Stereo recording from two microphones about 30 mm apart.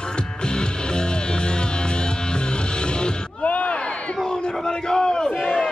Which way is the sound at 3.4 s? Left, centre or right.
Left.